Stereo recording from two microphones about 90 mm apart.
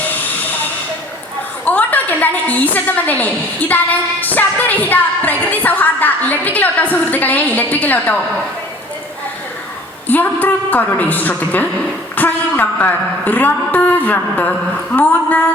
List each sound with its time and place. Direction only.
1.6 s a sound: 20° left (ahead or behind)
2.7 s a woman's voice: 20° left (ahead or behind)
10.1 s a woman's voice: 20° left (ahead or behind)